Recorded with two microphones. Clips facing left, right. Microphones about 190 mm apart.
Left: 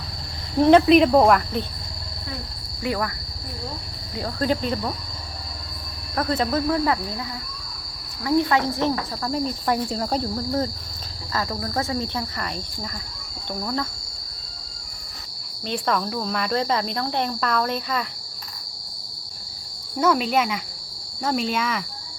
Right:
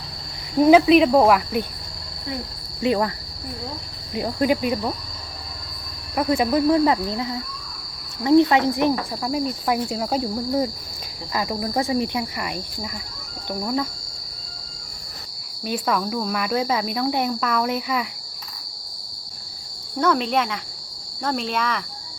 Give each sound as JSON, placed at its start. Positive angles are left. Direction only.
{"t": 0.6, "sound": "cricket", "side_deg": -5}
{"t": 2.8, "sound": "cricket", "side_deg": -25}
{"t": 4.1, "sound": "cricket", "side_deg": -15}
{"t": 6.1, "sound": "cricket", "side_deg": -10}
{"t": 15.6, "sound": "cricket", "side_deg": -5}
{"t": 20.0, "sound": "cricket", "side_deg": 5}